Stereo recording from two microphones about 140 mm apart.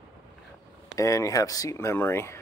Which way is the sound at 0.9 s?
20° left (ahead or behind).